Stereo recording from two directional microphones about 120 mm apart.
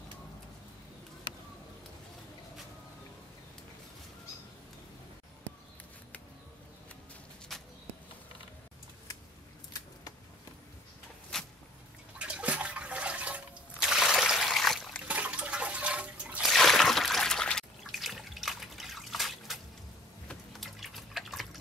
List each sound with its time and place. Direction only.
9.7 s scissors: 35° left (ahead or behind)
12.2 s toilet flush: 10° right (ahead or behind)
15.0 s trickle: 10° right (ahead or behind)
16.4 s trickle: centre (ahead or behind)
20.2 s liquid: centre (ahead or behind)